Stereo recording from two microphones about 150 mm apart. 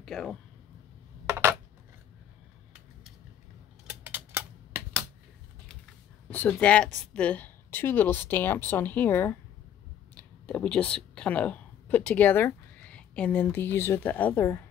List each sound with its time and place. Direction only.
0.0 s speech: 5° left (ahead or behind)
1.2 s coin: 15° right (ahead or behind)
4.0 s a sound: 15° right (ahead or behind)
6.3 s speech: 10° left (ahead or behind)